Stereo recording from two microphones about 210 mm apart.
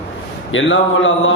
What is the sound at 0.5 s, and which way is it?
Speech, 65° left (ahead or behind).